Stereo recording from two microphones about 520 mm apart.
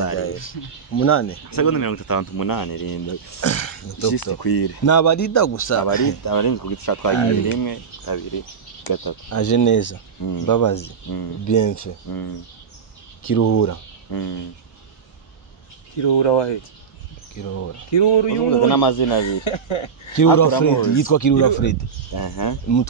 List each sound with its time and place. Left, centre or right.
0.1 s speech: left
1.5 s speech: left
13.2 s speech: left
14.1 s a sound: left
16.0 s speech: left
17.9 s speech: left
20.2 s speech: left